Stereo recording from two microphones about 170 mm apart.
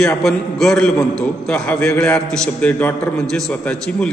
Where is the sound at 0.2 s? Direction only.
Centre (ahead or behind).